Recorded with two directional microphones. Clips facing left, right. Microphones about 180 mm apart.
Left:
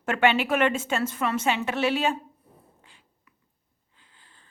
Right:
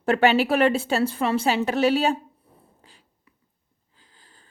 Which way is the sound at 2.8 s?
35° right (ahead or behind).